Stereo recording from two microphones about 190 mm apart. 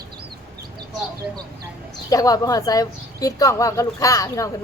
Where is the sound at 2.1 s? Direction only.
20° left (ahead or behind).